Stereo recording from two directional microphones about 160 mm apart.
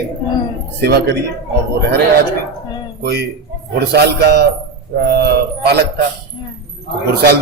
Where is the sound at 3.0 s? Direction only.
90° right.